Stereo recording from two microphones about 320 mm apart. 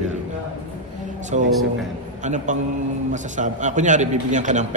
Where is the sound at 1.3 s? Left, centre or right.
Right.